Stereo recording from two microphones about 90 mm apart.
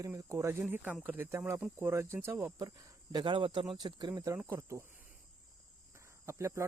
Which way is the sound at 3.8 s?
55° right (ahead or behind).